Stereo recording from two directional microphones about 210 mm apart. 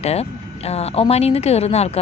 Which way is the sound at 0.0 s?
30° left (ahead or behind).